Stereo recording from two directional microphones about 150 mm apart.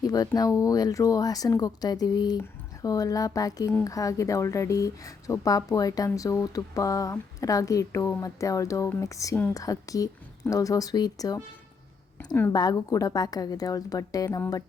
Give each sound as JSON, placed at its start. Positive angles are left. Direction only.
{"t": 0.0, "sound": "speech", "side_deg": 25}